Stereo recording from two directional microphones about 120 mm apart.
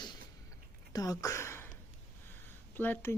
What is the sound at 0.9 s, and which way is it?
Speech, 30° left (ahead or behind).